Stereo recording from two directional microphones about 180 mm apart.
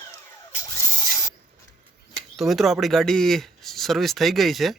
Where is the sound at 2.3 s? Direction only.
Centre (ahead or behind).